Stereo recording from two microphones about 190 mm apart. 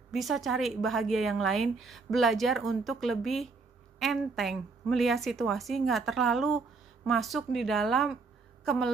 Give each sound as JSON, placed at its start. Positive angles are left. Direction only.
{"t": 0.1, "sound": "a woman's voice", "side_deg": 0}